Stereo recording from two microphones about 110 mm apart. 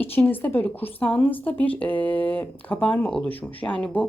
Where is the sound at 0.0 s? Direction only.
20° left (ahead or behind).